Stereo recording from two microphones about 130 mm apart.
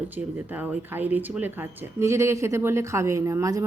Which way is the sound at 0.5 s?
15° right (ahead or behind).